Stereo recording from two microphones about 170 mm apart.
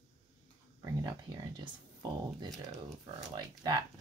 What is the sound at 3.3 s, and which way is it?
Speech, 25° right (ahead or behind).